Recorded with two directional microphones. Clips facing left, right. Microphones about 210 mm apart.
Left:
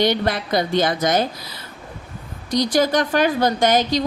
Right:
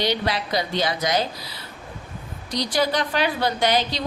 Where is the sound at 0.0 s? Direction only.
50° left (ahead or behind).